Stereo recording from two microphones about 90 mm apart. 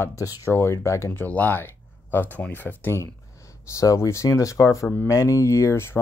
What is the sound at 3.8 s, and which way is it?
Speech, 35° left (ahead or behind).